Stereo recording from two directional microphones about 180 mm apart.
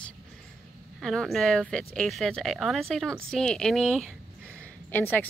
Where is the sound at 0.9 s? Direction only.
Centre (ahead or behind).